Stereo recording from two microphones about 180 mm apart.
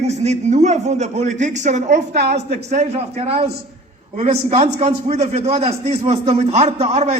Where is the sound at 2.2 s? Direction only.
65° right (ahead or behind).